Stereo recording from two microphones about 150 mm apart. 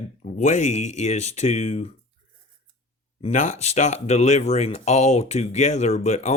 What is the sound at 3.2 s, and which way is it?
Speech, 45° left (ahead or behind).